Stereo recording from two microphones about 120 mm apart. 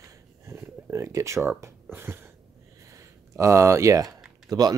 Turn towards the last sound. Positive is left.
turn(degrees=-35)  # may be behind; listen again after turning